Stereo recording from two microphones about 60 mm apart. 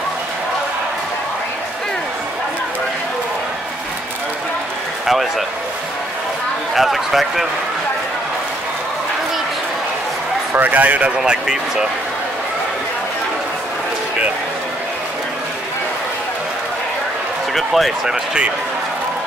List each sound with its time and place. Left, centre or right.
5.0 s a sound: centre
6.7 s a man's voice: centre
10.5 s speech: right
11.1 s speech: centre
17.6 s a man's voice: centre
18.0 s speech: centre